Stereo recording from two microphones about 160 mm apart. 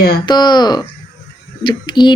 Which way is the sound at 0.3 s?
25° left (ahead or behind).